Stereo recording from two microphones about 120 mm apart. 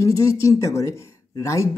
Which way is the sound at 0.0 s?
25° left (ahead or behind).